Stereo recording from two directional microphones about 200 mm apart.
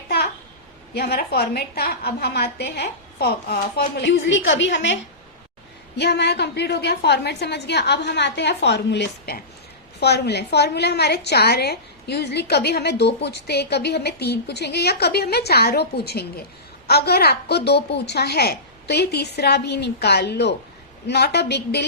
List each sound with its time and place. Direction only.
0.9 s a woman's voice: 50° left (ahead or behind)
6.0 s a woman's voice: 55° left (ahead or behind)